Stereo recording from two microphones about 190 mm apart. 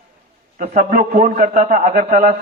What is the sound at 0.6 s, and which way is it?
A man's voice, 40° right (ahead or behind).